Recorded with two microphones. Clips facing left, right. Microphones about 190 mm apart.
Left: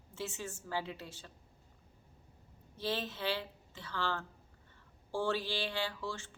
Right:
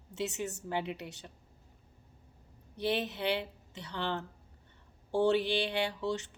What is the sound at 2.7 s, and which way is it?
Speech, 20° right (ahead or behind).